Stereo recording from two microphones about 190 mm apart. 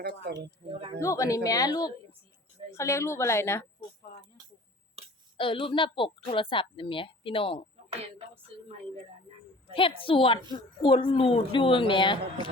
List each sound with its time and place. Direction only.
0.2 s speech: 60° right (ahead or behind)
1.0 s a woman's voice: 15° left (ahead or behind)
5.0 s a sound: 30° right (ahead or behind)
5.4 s speech: 25° left (ahead or behind)
9.7 s speech: 25° left (ahead or behind)